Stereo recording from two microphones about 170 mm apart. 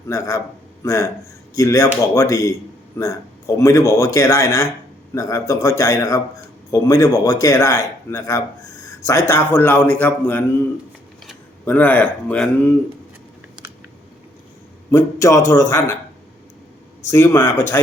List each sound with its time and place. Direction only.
0.1 s a man's voice: 20° left (ahead or behind)
11.6 s speech: 10° left (ahead or behind)
14.8 s speech: 15° left (ahead or behind)
17.1 s speech: 15° left (ahead or behind)